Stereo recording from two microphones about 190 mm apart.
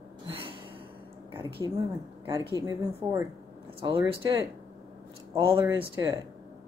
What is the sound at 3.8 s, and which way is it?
Speech, 30° right (ahead or behind).